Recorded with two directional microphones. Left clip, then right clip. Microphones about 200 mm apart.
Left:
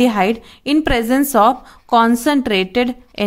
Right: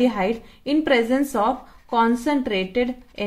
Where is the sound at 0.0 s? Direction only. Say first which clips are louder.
Left 6 dB; 45° left (ahead or behind).